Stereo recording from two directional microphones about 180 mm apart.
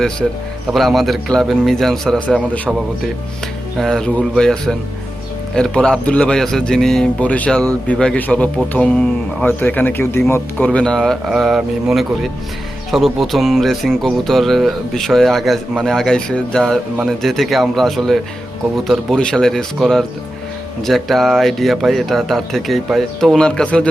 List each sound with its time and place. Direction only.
0.7 s speech: centre (ahead or behind)
3.8 s speech: centre (ahead or behind)